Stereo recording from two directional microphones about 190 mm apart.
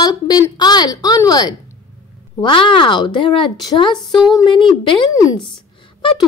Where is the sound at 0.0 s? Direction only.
20° left (ahead or behind).